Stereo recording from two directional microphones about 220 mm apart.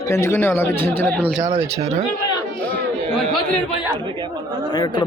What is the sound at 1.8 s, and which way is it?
Speech, 30° right (ahead or behind).